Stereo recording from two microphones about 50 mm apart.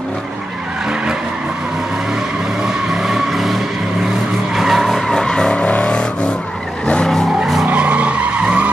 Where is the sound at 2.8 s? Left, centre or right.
Centre.